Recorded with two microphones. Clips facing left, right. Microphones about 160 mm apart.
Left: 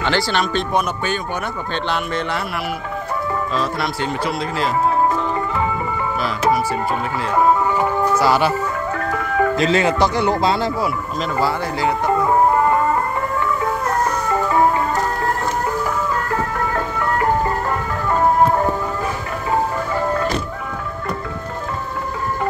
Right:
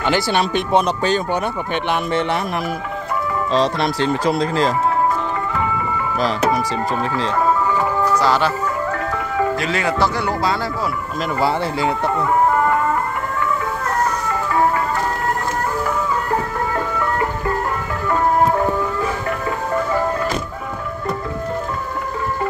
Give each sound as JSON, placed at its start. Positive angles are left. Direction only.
{"t": 0.0, "sound": "speech", "side_deg": -15}
{"t": 0.8, "sound": "speech", "side_deg": -35}
{"t": 1.9, "sound": "speech", "side_deg": -20}
{"t": 4.4, "sound": "speech", "side_deg": -40}
{"t": 8.2, "sound": "speech", "side_deg": 10}
{"t": 9.6, "sound": "speech", "side_deg": 25}
{"t": 11.3, "sound": "speech", "side_deg": -20}